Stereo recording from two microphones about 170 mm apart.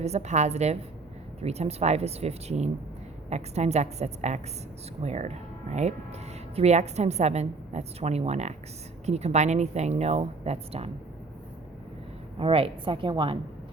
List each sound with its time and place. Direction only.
0.0 s a woman's voice: 40° right (ahead or behind)
12.4 s a woman's voice: 35° right (ahead or behind)